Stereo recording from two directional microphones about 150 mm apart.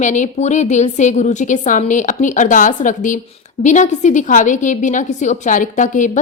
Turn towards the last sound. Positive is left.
turn(degrees=55)  # may be behind; listen again after turning